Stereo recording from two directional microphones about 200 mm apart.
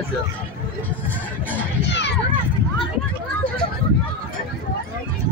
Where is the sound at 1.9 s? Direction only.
60° left (ahead or behind).